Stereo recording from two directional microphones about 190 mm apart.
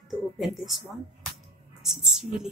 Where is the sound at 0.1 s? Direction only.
Centre (ahead or behind).